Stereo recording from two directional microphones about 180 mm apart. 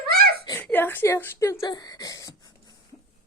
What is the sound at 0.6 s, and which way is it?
Whimper, 10° left (ahead or behind).